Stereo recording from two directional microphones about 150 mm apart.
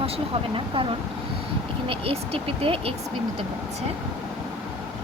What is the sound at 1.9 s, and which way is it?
Speech, 40° right (ahead or behind).